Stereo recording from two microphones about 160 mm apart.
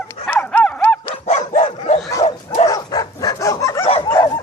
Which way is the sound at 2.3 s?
40° left (ahead or behind).